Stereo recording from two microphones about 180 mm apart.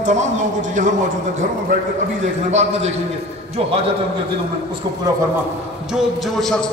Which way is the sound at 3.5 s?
30° right (ahead or behind).